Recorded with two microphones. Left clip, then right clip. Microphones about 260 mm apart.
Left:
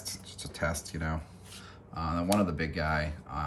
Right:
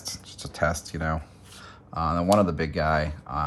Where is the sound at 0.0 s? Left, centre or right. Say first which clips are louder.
Right 4 dB; right.